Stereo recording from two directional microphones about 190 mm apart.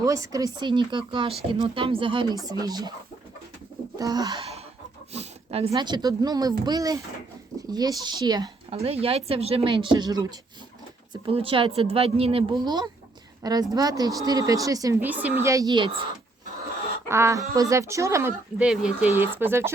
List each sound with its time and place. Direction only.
0.0 s speech: 15° right (ahead or behind)
3.9 s speech: 20° right (ahead or behind)
5.1 s a sound: 35° right (ahead or behind)
5.7 s a woman's voice: 20° right (ahead or behind)
17.1 s speech: 15° right (ahead or behind)